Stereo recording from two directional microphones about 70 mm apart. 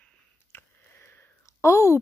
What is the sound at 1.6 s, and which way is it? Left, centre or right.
Speech, left.